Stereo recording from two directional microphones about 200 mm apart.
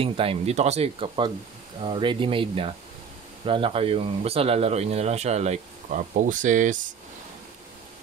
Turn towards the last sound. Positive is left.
turn(degrees=-40)  # may be behind; listen again after turning